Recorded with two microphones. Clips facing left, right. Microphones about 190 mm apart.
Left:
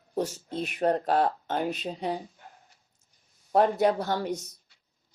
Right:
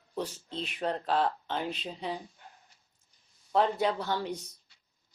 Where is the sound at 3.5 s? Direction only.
50° left (ahead or behind).